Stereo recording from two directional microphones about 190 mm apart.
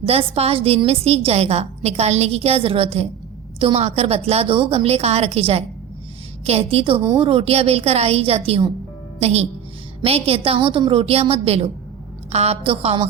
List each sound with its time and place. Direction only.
0.0 s a woman's voice: 30° right (ahead or behind)